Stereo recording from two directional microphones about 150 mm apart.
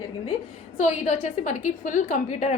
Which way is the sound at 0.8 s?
50° left (ahead or behind).